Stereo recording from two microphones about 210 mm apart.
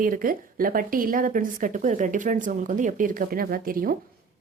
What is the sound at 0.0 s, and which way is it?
Speech, 40° right (ahead or behind).